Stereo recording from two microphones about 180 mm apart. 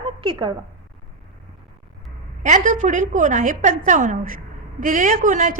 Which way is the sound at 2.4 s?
40° right (ahead or behind).